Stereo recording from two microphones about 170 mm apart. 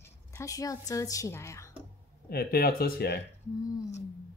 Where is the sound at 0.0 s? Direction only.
20° left (ahead or behind).